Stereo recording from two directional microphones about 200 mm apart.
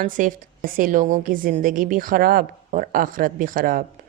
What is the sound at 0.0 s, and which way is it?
A woman's voice, 40° right (ahead or behind).